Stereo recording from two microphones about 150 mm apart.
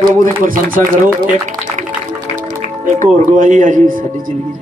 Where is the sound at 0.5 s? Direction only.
65° right (ahead or behind).